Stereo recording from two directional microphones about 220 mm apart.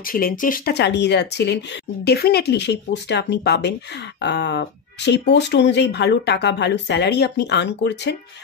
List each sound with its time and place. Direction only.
0.0 s speech: 40° left (ahead or behind)